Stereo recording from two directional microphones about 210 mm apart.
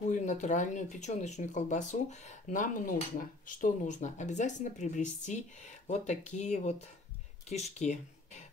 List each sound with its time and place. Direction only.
0.0 s speech: 35° left (ahead or behind)